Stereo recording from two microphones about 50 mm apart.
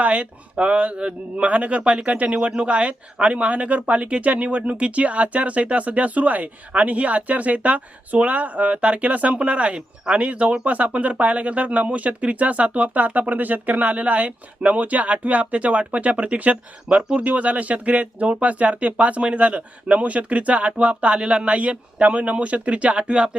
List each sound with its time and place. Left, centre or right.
0.0 s speech: right